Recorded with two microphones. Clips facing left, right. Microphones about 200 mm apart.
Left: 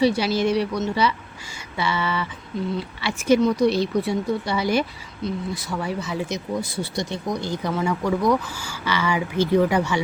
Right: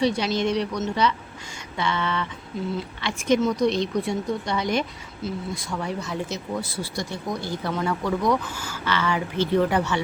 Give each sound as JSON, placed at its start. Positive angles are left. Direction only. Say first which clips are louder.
{"t": 0.0, "sound": "a woman's voice", "louder": "left 3 dB", "side_deg": 5}
{"t": 6.2, "sound": "speech", "louder": "left 3 dB", "side_deg": 15}